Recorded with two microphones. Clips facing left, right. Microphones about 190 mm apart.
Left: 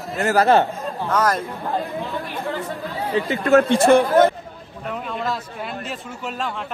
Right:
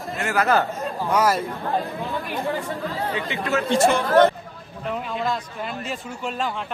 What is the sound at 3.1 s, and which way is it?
Speech, 45° left (ahead or behind).